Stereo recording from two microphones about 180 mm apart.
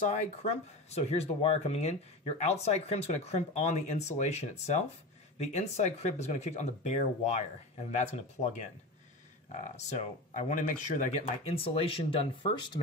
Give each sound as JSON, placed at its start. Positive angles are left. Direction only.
{"t": 0.1, "sound": "speech", "side_deg": 35}